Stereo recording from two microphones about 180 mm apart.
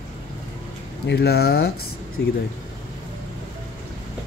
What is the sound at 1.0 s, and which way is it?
Speech, 65° left (ahead or behind).